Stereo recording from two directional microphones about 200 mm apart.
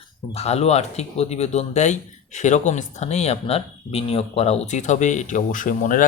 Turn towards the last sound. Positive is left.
turn(degrees=40)  # may be behind; listen again after turning